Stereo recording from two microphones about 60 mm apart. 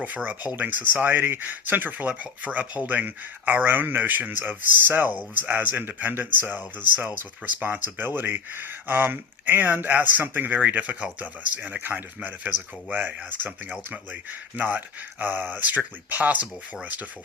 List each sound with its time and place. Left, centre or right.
0.0 s speech: right
13.3 s speech: right